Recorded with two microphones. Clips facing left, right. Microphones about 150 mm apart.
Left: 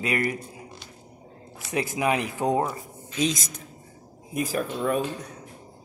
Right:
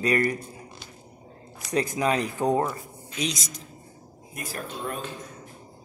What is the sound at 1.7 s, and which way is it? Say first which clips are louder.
Speech: right 1 dB; 10° left (ahead or behind).